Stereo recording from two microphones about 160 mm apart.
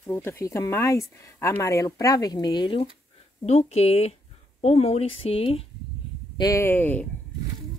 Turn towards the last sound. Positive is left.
turn(degrees=10)  # may be behind; listen again after turning